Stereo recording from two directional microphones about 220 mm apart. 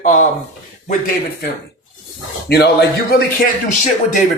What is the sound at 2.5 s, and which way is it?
Speech, 50° left (ahead or behind).